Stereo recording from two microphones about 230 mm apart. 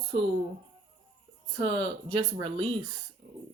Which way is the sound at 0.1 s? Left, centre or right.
Right.